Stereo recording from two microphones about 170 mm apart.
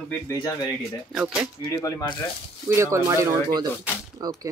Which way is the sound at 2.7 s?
15° right (ahead or behind).